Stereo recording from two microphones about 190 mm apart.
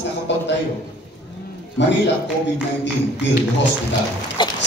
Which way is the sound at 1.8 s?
70° left (ahead or behind).